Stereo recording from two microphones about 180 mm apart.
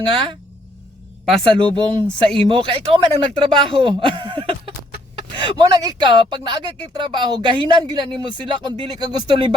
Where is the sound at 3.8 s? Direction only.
30° right (ahead or behind).